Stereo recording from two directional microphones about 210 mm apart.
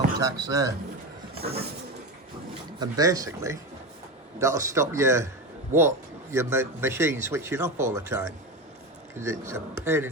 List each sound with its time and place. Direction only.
0.2 s speech: 15° right (ahead or behind)
1.4 s a sound: 30° right (ahead or behind)
2.7 s speech: 20° right (ahead or behind)
6.3 s speech: 10° right (ahead or behind)